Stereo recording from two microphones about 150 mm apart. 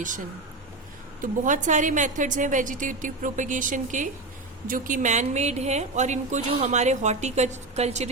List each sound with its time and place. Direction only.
1.2 s a woman's voice: 55° right (ahead or behind)